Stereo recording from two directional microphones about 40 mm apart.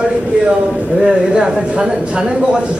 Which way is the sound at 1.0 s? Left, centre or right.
Right.